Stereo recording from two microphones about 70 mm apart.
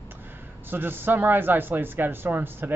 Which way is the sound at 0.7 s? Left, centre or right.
Right.